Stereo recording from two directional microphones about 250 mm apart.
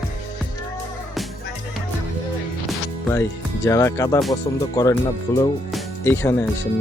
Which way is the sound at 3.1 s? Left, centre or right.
Centre.